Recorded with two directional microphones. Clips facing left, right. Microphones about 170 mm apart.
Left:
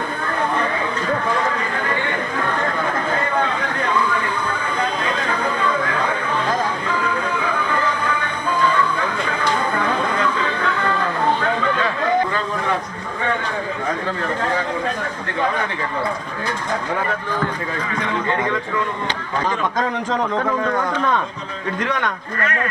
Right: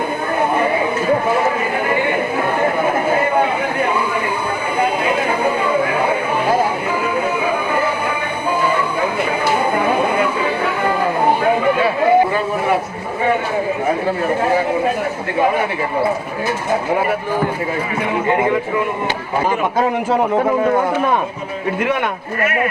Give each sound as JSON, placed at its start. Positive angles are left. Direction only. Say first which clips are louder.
{"t": 9.7, "sound": "music", "louder": "right 5 dB", "side_deg": -15}
{"t": 18.3, "sound": "speech", "louder": "right 7 dB", "side_deg": -20}
{"t": 20.4, "sound": "speech", "louder": "right 6 dB", "side_deg": -30}
{"t": 22.4, "sound": "speech", "louder": "right 6 dB", "side_deg": -15}